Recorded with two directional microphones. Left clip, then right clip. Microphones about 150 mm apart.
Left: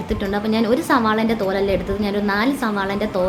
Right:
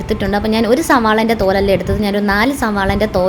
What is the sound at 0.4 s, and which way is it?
A woman's voice, 40° right (ahead or behind).